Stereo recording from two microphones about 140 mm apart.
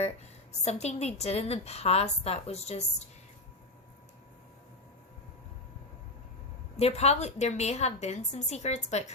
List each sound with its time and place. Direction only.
0.6 s a woman's voice: 50° left (ahead or behind)
6.7 s a woman's voice: 50° left (ahead or behind)